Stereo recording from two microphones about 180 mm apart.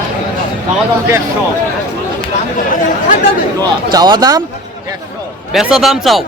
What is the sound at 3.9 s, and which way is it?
Speech, 25° right (ahead or behind).